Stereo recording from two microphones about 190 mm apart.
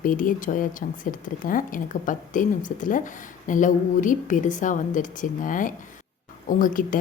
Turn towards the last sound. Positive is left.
turn(degrees=45)  # may be behind; listen again after turning